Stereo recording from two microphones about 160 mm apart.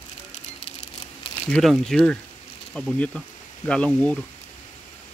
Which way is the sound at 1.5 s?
Centre (ahead or behind).